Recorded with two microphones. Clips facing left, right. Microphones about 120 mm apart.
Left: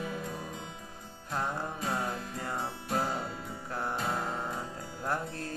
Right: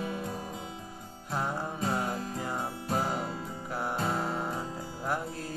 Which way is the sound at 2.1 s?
Centre (ahead or behind).